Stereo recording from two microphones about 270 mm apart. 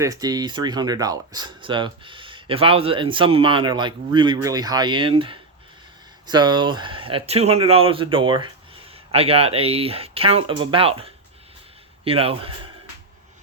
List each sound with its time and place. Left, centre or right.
0.0 s speech: centre